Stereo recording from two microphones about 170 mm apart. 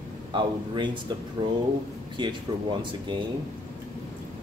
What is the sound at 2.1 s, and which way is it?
Speech, 30° right (ahead or behind).